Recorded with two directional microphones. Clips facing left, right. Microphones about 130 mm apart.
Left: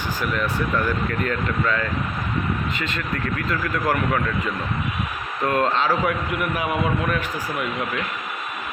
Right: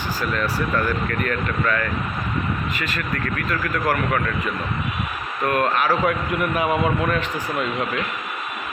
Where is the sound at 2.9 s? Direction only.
20° left (ahead or behind).